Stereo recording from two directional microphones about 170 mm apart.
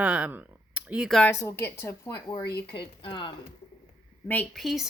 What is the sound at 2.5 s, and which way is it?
Speech, 70° left (ahead or behind).